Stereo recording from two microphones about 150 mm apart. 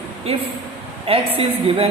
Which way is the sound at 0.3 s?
45° right (ahead or behind).